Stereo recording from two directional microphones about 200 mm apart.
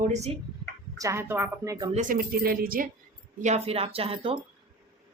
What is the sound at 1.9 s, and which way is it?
Speech, 40° right (ahead or behind).